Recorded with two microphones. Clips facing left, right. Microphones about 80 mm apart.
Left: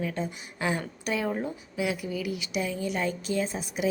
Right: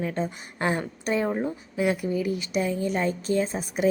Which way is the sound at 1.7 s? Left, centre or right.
Right.